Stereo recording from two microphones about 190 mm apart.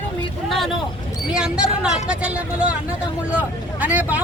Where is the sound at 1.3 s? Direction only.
5° right (ahead or behind).